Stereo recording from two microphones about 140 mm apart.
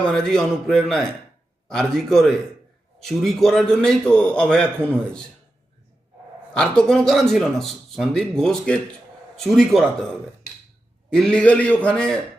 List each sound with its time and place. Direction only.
0.1 s a man's voice: 5° left (ahead or behind)
6.6 s a man's voice: 5° left (ahead or behind)
11.1 s a man's voice: 5° left (ahead or behind)